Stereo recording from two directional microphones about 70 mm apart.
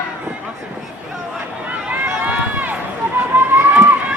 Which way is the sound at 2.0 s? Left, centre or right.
Right.